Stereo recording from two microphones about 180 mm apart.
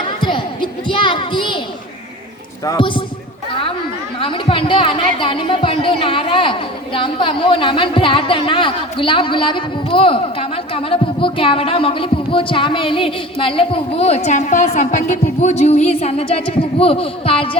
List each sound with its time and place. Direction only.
0.2 s children playing: 25° left (ahead or behind)
2.7 s speech: 30° left (ahead or behind)
4.2 s speech: 30° left (ahead or behind)